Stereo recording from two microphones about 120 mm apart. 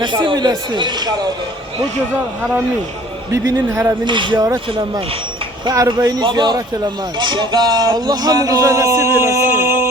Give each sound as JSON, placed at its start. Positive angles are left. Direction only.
{"t": 0.0, "sound": "speech", "side_deg": -40}
{"t": 3.3, "sound": "a man's voice", "side_deg": -20}
{"t": 4.0, "sound": "speech", "side_deg": -40}
{"t": 5.6, "sound": "speech", "side_deg": -35}